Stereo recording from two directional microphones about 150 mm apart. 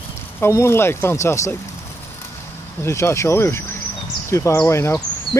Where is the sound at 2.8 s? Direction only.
15° left (ahead or behind).